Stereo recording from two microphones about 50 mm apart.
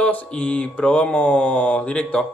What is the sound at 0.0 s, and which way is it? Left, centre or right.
Speech, left.